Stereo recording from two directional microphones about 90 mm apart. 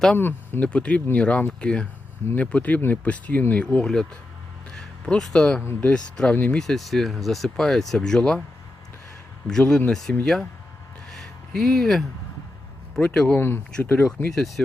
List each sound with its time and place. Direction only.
0.2 s speech: 25° left (ahead or behind)
6.6 s speech: centre (ahead or behind)
9.5 s speech: 5° left (ahead or behind)
11.1 s a sound: 5° left (ahead or behind)
13.0 s speech: 15° left (ahead or behind)
14.3 s speech: centre (ahead or behind)